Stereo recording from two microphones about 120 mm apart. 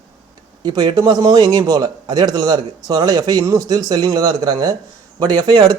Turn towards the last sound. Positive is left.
turn(degrees=-35)  # may be behind; listen again after turning